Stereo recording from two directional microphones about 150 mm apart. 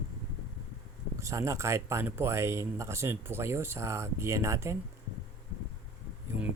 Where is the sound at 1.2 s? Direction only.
20° right (ahead or behind).